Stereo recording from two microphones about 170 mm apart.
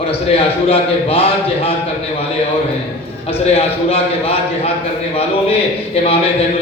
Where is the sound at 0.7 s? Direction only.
35° left (ahead or behind).